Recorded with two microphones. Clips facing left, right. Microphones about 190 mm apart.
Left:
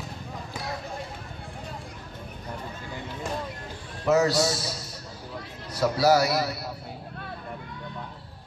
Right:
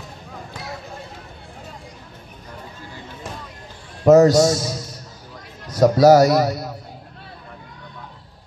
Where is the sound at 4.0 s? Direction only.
45° right (ahead or behind).